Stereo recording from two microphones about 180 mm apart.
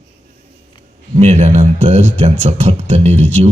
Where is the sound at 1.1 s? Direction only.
35° right (ahead or behind).